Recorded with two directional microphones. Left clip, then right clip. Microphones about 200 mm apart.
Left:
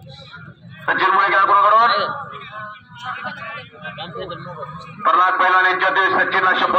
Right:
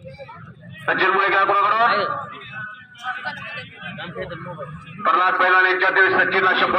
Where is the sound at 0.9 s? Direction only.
5° left (ahead or behind).